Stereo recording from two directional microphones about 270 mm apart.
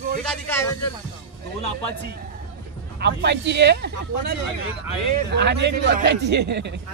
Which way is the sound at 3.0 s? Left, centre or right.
Right.